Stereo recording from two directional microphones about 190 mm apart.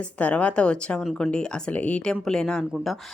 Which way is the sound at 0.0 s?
5° left (ahead or behind).